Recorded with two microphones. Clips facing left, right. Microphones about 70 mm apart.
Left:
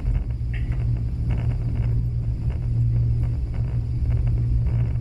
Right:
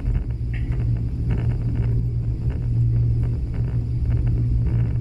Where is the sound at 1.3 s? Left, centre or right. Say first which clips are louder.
Right 3 dB; centre.